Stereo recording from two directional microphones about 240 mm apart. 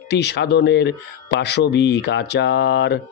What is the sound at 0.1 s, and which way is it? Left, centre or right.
Speech, left.